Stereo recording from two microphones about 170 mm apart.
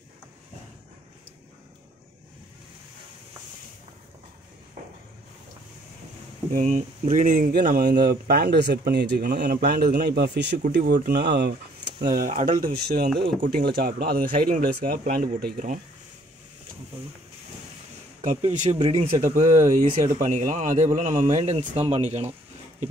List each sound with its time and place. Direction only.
6.5 s speech: 50° right (ahead or behind); by 10.5 s 80° right
10.8 s speech: 60° right (ahead or behind); by 11.5 s 75° right (ahead or behind)
12.0 s speech: 55° right (ahead or behind)
18.5 s speech: 45° right (ahead or behind)